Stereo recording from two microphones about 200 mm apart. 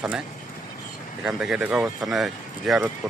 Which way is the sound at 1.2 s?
5° right (ahead or behind).